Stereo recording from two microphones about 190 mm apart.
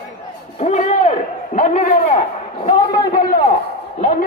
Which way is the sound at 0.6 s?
35° left (ahead or behind).